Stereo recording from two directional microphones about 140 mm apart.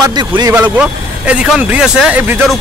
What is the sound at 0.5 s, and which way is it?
Speech, 10° right (ahead or behind).